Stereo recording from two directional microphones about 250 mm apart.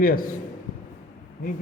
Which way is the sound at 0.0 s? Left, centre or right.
Left.